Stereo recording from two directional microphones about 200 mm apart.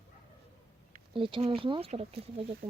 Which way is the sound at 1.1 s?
25° right (ahead or behind).